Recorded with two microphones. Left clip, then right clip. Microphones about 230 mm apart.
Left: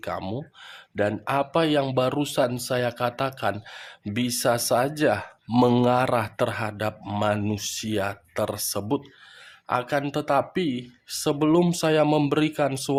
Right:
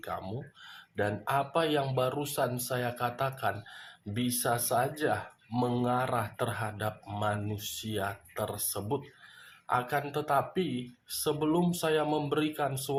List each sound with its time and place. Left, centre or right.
0.0 s speech: left